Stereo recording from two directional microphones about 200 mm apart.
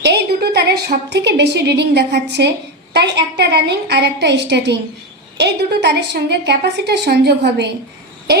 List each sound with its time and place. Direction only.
0.0 s a woman's voice: 55° right (ahead or behind)